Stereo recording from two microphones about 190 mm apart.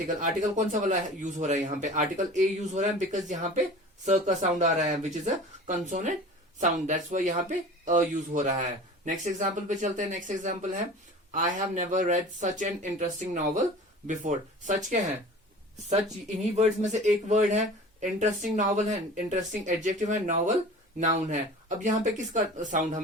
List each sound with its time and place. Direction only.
0.1 s speech: 40° right (ahead or behind)
16.6 s speech: 35° right (ahead or behind)